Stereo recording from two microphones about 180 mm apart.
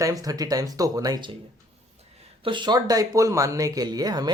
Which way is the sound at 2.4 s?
25° right (ahead or behind).